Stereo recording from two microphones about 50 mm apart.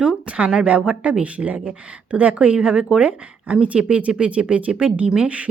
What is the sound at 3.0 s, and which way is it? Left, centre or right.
A woman's voice, right.